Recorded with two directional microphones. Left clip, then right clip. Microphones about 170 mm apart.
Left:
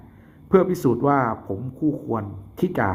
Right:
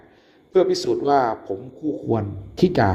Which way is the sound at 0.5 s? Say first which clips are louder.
Even; 15° right (ahead or behind).